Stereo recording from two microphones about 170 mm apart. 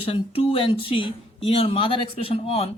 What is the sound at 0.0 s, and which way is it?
A man's voice, 35° left (ahead or behind).